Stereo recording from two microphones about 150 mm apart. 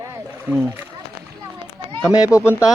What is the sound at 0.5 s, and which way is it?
Speech, 15° right (ahead or behind).